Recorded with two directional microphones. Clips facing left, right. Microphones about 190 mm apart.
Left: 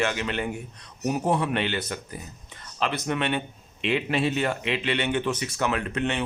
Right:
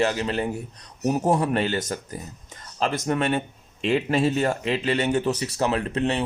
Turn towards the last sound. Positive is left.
turn(degrees=-35)  # may be behind; listen again after turning